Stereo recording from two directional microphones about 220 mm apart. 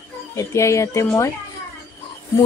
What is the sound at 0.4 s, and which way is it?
Speech, 15° left (ahead or behind).